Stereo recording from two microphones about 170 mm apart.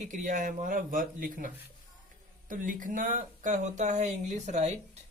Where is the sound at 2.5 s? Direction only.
50° right (ahead or behind).